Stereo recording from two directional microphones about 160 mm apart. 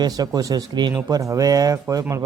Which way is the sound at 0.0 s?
25° right (ahead or behind).